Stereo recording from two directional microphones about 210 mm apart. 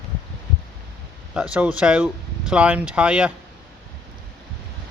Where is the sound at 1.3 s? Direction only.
5° right (ahead or behind).